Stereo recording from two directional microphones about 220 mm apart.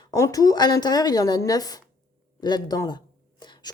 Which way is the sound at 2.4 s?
20° left (ahead or behind).